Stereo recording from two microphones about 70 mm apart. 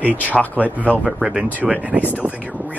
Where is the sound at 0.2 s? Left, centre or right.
Left.